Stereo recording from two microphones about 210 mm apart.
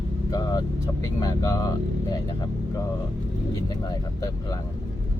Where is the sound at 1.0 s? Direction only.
15° left (ahead or behind).